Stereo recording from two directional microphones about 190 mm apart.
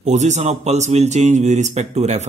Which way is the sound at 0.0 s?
40° right (ahead or behind).